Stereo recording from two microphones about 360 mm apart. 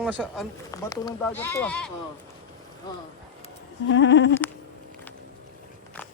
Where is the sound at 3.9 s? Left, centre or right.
Left.